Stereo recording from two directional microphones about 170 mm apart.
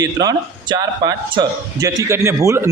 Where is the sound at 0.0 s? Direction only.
20° right (ahead or behind).